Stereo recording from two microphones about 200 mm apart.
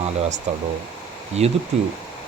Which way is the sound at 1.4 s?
35° right (ahead or behind).